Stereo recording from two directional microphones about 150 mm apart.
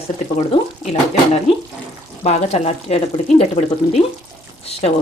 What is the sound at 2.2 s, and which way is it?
Speech, 45° left (ahead or behind).